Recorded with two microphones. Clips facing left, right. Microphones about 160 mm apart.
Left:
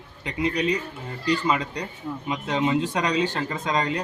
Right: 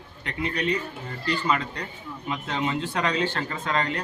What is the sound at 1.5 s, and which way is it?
A man's voice, 15° left (ahead or behind).